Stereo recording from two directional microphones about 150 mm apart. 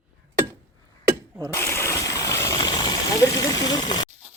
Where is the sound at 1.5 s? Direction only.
15° left (ahead or behind).